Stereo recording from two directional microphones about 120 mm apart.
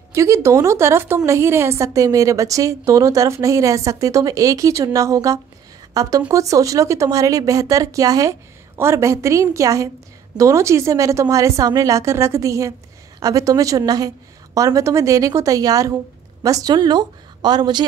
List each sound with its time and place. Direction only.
0.1 s a woman's voice: 25° right (ahead or behind)